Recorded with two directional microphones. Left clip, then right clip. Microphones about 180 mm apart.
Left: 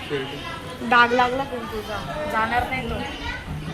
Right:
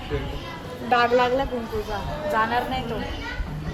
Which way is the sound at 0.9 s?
50° left (ahead or behind).